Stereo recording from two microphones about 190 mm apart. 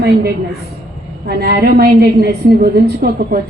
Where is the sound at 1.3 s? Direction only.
55° right (ahead or behind).